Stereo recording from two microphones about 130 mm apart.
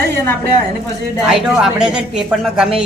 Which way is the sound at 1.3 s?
5° right (ahead or behind).